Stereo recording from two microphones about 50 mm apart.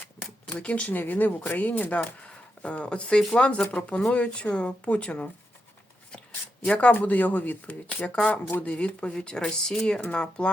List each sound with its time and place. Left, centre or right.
0.6 s speech: left
2.2 s speech: left
6.7 s speech: left
8.1 s speech: left